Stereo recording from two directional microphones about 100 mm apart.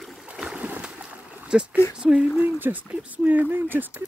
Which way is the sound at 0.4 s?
10° right (ahead or behind).